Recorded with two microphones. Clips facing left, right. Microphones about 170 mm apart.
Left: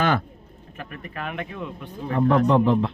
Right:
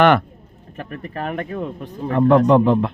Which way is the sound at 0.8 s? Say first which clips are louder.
Right 6 dB; 35° right (ahead or behind).